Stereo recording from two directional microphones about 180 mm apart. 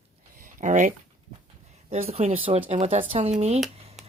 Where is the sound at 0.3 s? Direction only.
45° right (ahead or behind).